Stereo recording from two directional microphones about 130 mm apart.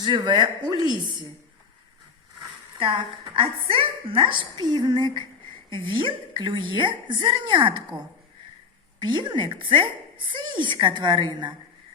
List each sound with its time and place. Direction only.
0.0 s speech: 35° right (ahead or behind)
2.7 s speech: 40° right (ahead or behind)